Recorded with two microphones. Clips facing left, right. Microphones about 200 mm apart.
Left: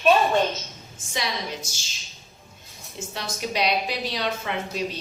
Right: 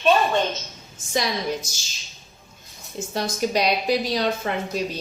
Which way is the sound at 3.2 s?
40° right (ahead or behind).